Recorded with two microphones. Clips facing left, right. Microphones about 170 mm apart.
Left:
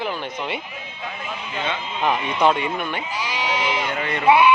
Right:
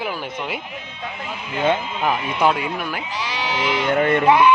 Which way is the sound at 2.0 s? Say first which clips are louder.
Left 2 dB; 5° right (ahead or behind).